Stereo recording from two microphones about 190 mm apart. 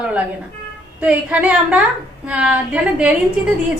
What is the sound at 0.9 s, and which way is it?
A woman's voice, 5° right (ahead or behind).